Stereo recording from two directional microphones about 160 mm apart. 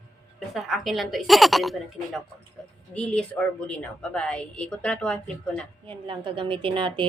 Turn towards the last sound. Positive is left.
turn(degrees=-30)  # may be behind; listen again after turning